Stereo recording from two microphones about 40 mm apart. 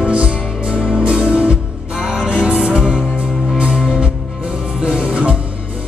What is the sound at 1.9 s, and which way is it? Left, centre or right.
Music, centre.